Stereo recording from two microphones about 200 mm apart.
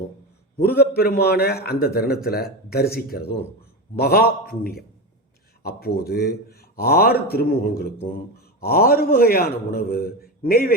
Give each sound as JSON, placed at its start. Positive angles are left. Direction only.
{"t": 0.5, "sound": "a man's voice", "side_deg": 50}